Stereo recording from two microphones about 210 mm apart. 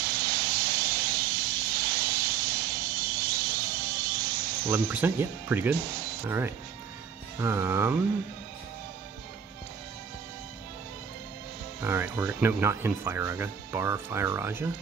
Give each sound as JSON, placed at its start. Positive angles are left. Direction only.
{"t": 0.0, "sound": "vehicle", "side_deg": -45}
{"t": 4.6, "sound": "speech", "side_deg": -10}
{"t": 11.8, "sound": "speech", "side_deg": -10}